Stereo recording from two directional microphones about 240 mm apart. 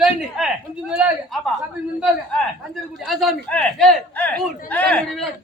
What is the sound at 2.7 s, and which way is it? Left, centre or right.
A man's voice, centre.